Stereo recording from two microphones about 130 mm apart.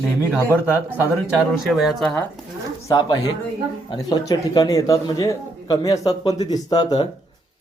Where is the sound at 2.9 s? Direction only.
30° left (ahead or behind).